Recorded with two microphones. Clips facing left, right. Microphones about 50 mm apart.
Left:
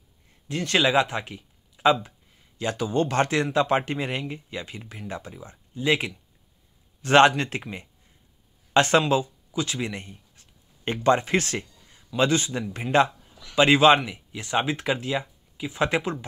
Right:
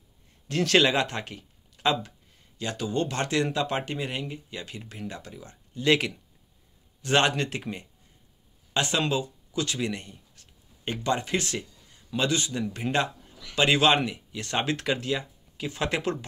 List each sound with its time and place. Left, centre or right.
0.5 s speech: centre
0.9 s speech: centre
2.6 s speech: left
5.9 s speech: centre
7.0 s speech: left
8.7 s speech: left
9.5 s speech: left